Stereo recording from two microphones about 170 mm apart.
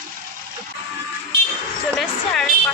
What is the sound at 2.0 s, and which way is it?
Music, centre (ahead or behind).